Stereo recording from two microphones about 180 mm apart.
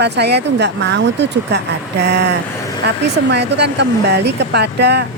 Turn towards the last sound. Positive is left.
turn(degrees=-65)  # may be behind; listen again after turning